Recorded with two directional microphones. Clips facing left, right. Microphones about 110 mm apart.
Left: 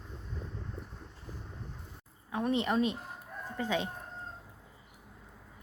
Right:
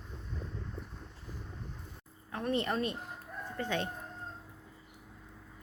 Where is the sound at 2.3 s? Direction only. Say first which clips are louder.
Left 2 dB; 10° left (ahead or behind).